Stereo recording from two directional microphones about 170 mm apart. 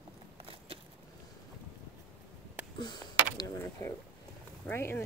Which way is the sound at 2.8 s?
25° left (ahead or behind).